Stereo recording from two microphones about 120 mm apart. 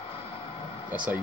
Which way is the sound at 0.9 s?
10° right (ahead or behind).